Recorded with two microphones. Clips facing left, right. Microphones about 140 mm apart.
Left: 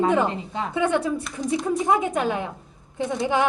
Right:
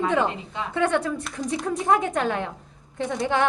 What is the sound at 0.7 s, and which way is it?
A woman's voice, 10° left (ahead or behind).